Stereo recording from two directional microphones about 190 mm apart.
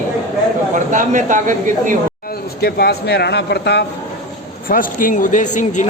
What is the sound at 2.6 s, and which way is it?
Speech, 55° left (ahead or behind).